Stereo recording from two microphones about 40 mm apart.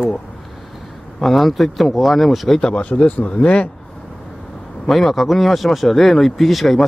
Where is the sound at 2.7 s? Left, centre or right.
Left.